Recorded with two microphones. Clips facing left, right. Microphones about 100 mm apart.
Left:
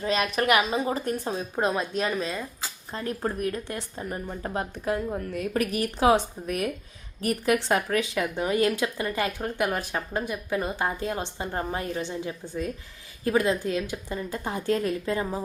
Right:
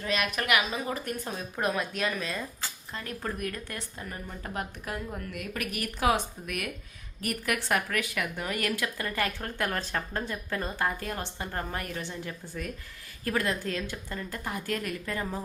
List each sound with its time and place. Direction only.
0.0 s a woman's voice: 30° left (ahead or behind)